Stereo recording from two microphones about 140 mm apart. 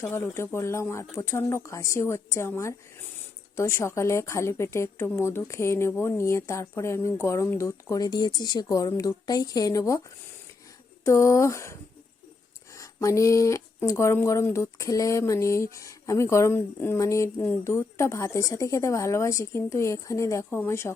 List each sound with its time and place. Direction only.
0.0 s a woman's voice: 20° left (ahead or behind)
11.0 s a woman's voice: 20° left (ahead or behind)